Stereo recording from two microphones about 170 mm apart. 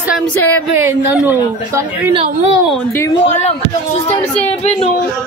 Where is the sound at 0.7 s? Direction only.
10° right (ahead or behind).